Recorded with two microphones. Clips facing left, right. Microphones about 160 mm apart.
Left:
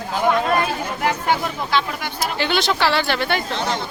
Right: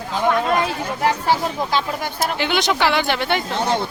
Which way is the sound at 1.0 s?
35° right (ahead or behind).